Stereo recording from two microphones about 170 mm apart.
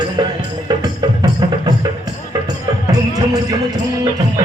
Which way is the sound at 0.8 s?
25° right (ahead or behind).